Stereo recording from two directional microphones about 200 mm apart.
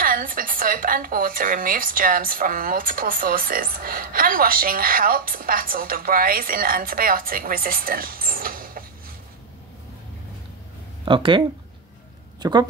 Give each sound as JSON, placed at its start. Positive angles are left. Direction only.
{"t": 0.0, "sound": "a woman's voice", "side_deg": -45}
{"t": 11.1, "sound": "speech", "side_deg": -25}